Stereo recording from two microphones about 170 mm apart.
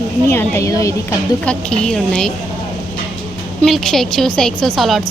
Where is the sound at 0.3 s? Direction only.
15° left (ahead or behind).